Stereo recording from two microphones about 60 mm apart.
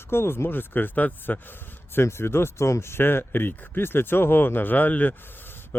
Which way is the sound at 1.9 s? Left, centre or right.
Left.